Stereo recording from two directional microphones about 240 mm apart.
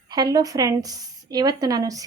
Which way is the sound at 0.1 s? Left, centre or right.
Centre.